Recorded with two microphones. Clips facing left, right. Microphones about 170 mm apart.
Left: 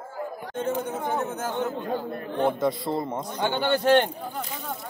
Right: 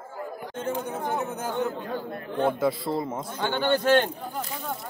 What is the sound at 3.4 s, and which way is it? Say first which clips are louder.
Speech: even; 15° left (ahead or behind).